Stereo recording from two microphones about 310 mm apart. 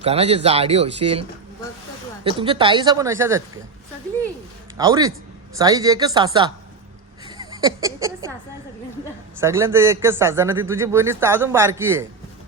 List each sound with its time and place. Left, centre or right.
0.0 s speech: centre
2.2 s speech: centre
4.8 s speech: centre
9.4 s speech: centre